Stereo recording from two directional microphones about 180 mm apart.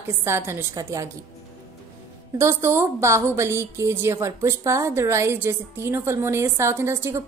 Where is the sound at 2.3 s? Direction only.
15° right (ahead or behind).